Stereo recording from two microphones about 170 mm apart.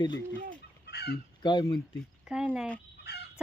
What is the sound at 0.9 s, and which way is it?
Chicken, 75° left (ahead or behind).